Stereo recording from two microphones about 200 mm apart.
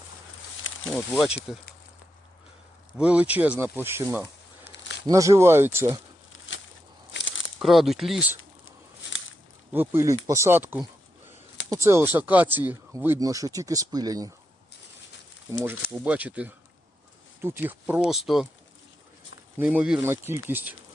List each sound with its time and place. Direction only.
0.9 s speech: centre (ahead or behind)
3.0 s speech: 5° right (ahead or behind)
4.6 s a sound: 65° left (ahead or behind)
5.0 s speech: 15° right (ahead or behind)
6.5 s a sound: 65° left (ahead or behind)
7.1 s crumpling: 65° left (ahead or behind)
7.6 s speech: centre (ahead or behind)
9.7 s speech: 10° right (ahead or behind)
15.9 s speech: 10° right (ahead or behind)
19.5 s speech: 5° right (ahead or behind)